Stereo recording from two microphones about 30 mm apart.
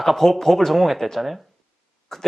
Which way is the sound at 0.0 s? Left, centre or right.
Centre.